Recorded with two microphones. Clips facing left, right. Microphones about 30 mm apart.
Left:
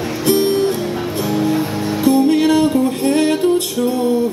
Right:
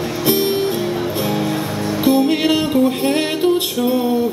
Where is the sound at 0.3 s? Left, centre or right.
Centre.